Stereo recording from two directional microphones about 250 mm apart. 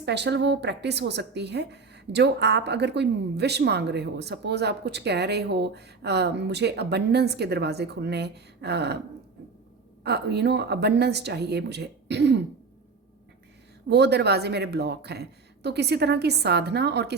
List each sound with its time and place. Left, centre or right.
0.0 s a woman's voice: right
10.0 s speech: right
13.9 s speech: right